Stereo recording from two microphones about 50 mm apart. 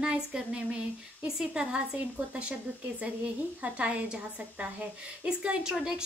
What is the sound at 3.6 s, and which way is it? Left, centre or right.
A woman's voice, right.